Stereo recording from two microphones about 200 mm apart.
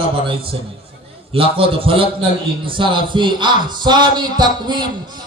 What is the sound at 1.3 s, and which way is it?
A man's voice, 25° right (ahead or behind).